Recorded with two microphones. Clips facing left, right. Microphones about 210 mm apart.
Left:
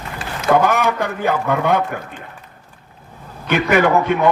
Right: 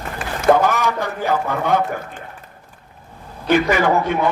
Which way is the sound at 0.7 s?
55° left (ahead or behind).